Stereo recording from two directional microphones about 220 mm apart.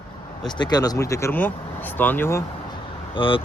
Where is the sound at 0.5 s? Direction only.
20° left (ahead or behind).